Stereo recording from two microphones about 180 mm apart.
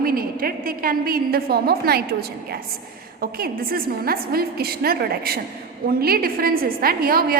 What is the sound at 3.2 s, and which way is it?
A woman's voice, 55° right (ahead or behind).